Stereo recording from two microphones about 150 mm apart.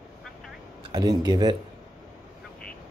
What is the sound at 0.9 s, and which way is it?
Speech, 25° right (ahead or behind).